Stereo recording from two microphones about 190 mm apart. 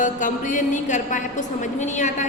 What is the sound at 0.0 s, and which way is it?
A woman's voice, 45° left (ahead or behind).